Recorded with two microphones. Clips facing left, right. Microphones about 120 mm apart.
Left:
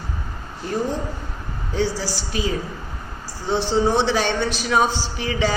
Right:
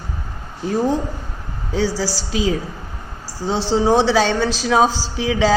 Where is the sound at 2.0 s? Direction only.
90° right.